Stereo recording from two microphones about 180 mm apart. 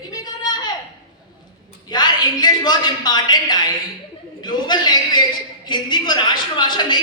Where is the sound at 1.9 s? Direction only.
25° left (ahead or behind).